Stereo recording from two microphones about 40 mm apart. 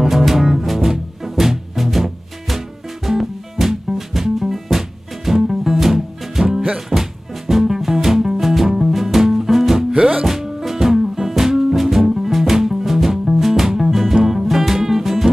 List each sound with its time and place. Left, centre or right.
0.0 s music: centre
9.9 s music: centre
10.2 s music: centre